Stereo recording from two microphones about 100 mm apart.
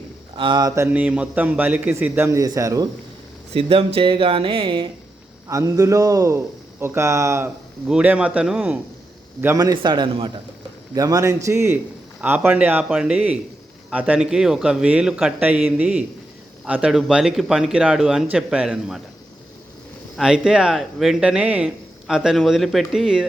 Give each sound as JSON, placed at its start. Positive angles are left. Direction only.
{"t": 0.3, "sound": "speech", "side_deg": -50}
{"t": 0.9, "sound": "speech", "side_deg": -15}
{"t": 2.4, "sound": "a man's voice", "side_deg": -35}
{"t": 3.5, "sound": "speech", "side_deg": -75}
{"t": 5.5, "sound": "a man's voice", "side_deg": -35}
{"t": 7.9, "sound": "speech", "side_deg": -10}
{"t": 9.6, "sound": "speech", "side_deg": -45}
{"t": 10.9, "sound": "a man's voice", "side_deg": -35}
{"t": 20.1, "sound": "speech", "side_deg": -5}